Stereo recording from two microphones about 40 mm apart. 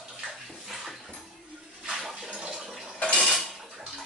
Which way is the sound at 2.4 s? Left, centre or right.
Right.